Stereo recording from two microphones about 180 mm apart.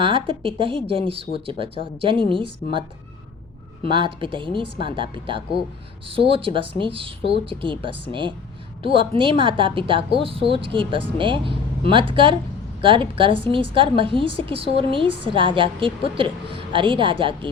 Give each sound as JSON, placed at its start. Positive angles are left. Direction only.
{"t": 0.0, "sound": "a woman's voice", "side_deg": -30}
{"t": 3.8, "sound": "a woman's voice", "side_deg": -25}